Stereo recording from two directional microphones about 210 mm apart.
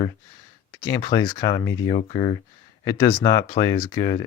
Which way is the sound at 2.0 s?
25° left (ahead or behind).